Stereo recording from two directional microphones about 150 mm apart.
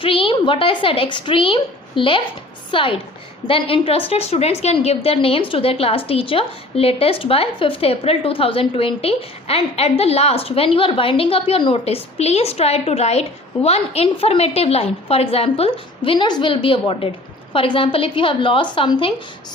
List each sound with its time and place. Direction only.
0.0 s a woman's voice: 35° left (ahead or behind)
16.0 s a woman's voice: 30° left (ahead or behind)